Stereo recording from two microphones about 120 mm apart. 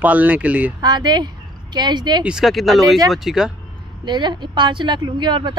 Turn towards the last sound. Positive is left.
turn(degrees=-40)  # may be behind; listen again after turning